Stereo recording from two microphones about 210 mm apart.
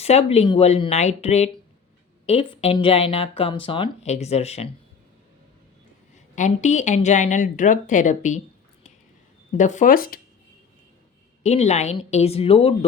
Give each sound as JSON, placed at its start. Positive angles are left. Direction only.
{"t": 0.0, "sound": "speech", "side_deg": 30}
{"t": 6.1, "sound": "speech", "side_deg": 35}
{"t": 9.6, "sound": "speech", "side_deg": 35}
{"t": 11.4, "sound": "speech", "side_deg": 30}